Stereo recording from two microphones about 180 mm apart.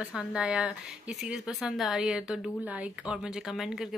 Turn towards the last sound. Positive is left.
turn(degrees=-5)  # may be behind; listen again after turning